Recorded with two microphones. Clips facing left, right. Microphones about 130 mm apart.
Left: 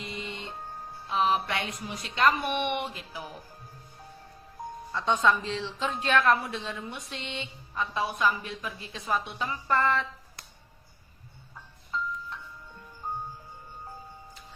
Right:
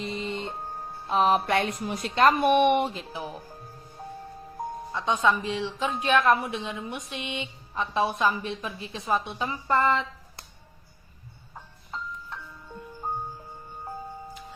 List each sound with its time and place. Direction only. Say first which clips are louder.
0.0 s music: right 6 dB; 35° right (ahead or behind)
1.0 s a woman's voice: right 4 dB; 45° right (ahead or behind)
3.0 s speech: right 5 dB; 25° right (ahead or behind)
4.9 s a woman's voice: even; 15° right (ahead or behind)
13.0 s music: right 3 dB; 40° right (ahead or behind)